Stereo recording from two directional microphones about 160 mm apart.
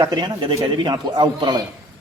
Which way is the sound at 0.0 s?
25° right (ahead or behind).